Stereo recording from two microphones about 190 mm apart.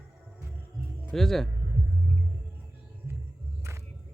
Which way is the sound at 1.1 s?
Centre (ahead or behind).